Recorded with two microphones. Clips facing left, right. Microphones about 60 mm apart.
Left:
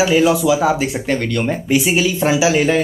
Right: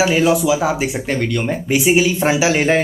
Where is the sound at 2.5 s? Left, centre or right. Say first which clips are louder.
Left 1 dB; right.